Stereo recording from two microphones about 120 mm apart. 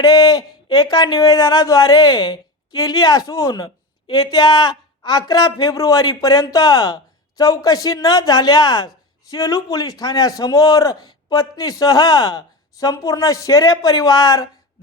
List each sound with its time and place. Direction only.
0.0 s a man's voice: 30° left (ahead or behind)